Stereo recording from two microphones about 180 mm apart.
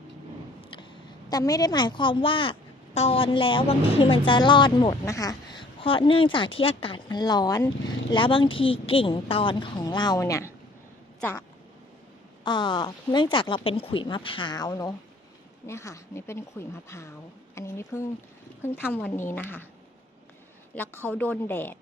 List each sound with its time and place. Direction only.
1.3 s a woman's voice: 20° left (ahead or behind)
12.5 s a woman's voice: 25° left (ahead or behind)
20.7 s speech: 10° left (ahead or behind)